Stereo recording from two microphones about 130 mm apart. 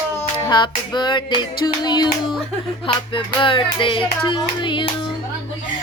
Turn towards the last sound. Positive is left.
turn(degrees=35)  # may be behind; listen again after turning